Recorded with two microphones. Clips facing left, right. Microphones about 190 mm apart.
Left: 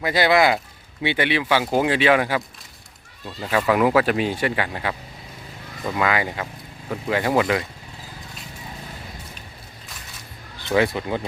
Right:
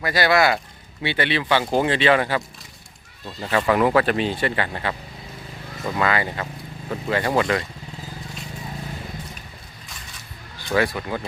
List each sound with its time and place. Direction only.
0.0 s speech: 20° left (ahead or behind)
3.4 s speech: 5° left (ahead or behind)
10.8 s speech: 20° left (ahead or behind)